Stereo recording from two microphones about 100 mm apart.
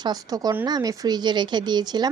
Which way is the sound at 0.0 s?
40° right (ahead or behind).